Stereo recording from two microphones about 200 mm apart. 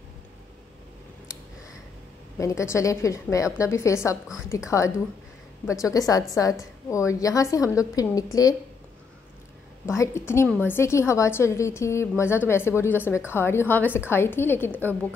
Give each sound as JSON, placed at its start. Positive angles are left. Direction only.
{"t": 2.3, "sound": "a woman's voice", "side_deg": 15}
{"t": 9.8, "sound": "a woman's voice", "side_deg": 15}